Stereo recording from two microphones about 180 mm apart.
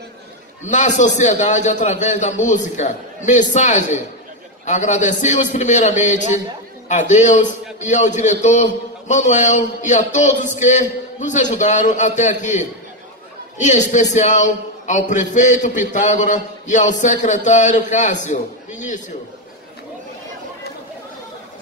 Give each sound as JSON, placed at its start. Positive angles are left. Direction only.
{"t": 0.7, "sound": "a man's voice", "side_deg": 40}